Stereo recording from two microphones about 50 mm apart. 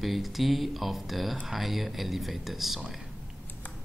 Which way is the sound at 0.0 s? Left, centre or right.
Centre.